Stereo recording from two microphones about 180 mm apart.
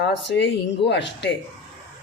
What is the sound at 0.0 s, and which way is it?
Speech, 75° left (ahead or behind).